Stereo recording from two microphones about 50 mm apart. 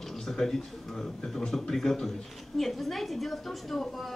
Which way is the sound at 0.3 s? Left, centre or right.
Centre.